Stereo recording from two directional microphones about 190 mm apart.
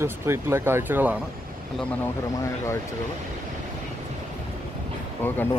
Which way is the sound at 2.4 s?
15° left (ahead or behind).